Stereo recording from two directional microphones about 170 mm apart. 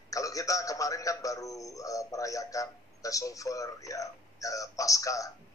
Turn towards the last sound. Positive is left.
turn(degrees=20)  # may be behind; listen again after turning